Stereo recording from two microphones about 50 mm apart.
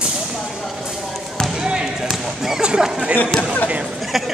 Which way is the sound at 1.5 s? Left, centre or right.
Centre.